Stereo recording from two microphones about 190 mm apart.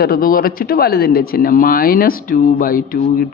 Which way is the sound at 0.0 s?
50° left (ahead or behind).